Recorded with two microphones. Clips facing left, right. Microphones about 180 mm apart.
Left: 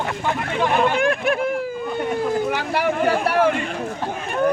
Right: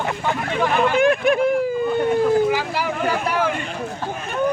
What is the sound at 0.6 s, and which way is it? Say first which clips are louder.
Speech: right 1 dB; centre (ahead or behind).